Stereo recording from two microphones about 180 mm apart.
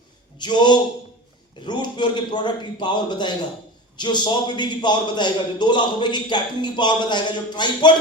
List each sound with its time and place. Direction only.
0.3 s a man's voice: 25° left (ahead or behind)